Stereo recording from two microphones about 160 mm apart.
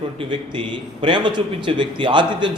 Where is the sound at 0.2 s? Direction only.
30° right (ahead or behind).